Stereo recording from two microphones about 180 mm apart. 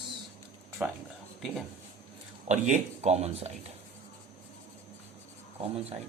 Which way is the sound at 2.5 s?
40° right (ahead or behind).